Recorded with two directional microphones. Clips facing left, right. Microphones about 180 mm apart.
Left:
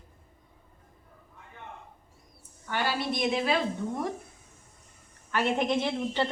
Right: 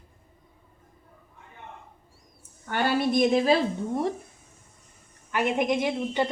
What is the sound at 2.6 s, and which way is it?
Speech, 45° right (ahead or behind).